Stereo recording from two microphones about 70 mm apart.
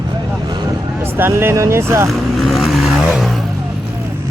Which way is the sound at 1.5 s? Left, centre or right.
Right.